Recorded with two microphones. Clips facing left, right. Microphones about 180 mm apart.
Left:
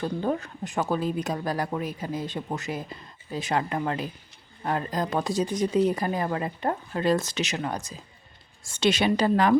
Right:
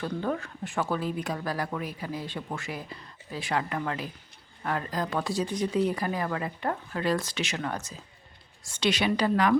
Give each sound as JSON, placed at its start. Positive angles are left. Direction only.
{"t": 0.2, "sound": "speech", "side_deg": 20}
{"t": 8.7, "sound": "speech", "side_deg": 25}